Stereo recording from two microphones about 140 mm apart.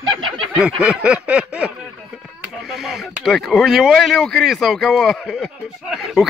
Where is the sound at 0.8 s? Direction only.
5° right (ahead or behind).